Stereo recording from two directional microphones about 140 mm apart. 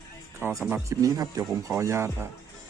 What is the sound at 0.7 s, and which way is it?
Speech, 20° right (ahead or behind).